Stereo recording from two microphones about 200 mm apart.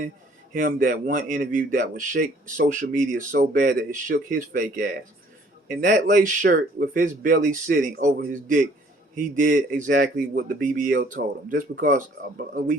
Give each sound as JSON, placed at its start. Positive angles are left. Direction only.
{"t": 0.5, "sound": "speech", "side_deg": -45}